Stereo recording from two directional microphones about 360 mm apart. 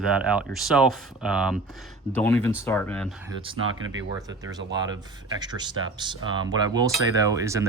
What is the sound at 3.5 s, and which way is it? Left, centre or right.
Speech, centre.